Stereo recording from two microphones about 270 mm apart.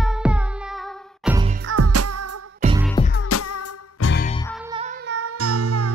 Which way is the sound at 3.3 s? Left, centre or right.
Left.